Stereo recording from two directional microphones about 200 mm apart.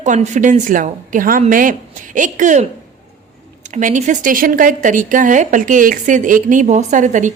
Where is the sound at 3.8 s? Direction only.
40° right (ahead or behind).